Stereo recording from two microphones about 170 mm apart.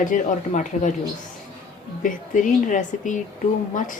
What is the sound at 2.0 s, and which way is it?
Speech, 50° left (ahead or behind).